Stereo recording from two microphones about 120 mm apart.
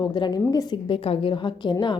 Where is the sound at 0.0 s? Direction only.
40° left (ahead or behind).